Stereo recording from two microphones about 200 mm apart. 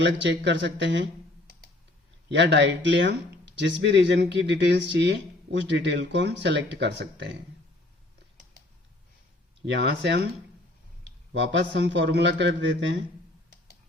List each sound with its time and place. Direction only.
0.0 s speech: 60° right (ahead or behind)
2.3 s speech: 60° right (ahead or behind)
9.6 s speech: 60° right (ahead or behind)
11.3 s speech: 65° right (ahead or behind)